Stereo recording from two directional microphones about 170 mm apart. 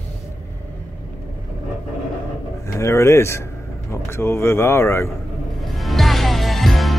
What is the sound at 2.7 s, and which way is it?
A man's voice, 15° left (ahead or behind).